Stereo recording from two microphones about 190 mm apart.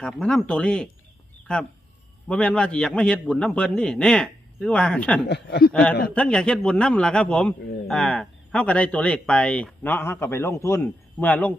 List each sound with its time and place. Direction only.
0.0 s a man's voice: 5° left (ahead or behind)
2.2 s a man's voice: 5° left (ahead or behind)
5.3 s speech: 60° left (ahead or behind)
5.7 s speech: 5° left (ahead or behind)